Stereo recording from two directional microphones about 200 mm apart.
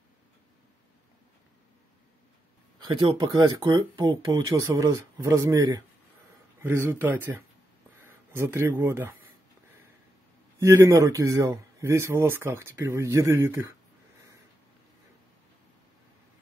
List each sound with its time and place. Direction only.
2.8 s speech: 20° right (ahead or behind)
10.6 s speech: 15° right (ahead or behind)